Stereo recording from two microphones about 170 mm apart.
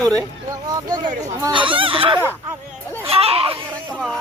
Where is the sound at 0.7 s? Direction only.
25° right (ahead or behind).